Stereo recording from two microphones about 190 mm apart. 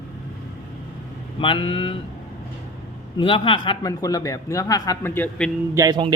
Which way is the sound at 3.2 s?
25° left (ahead or behind).